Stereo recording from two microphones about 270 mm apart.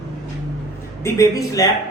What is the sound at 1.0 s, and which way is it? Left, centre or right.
Speech, centre.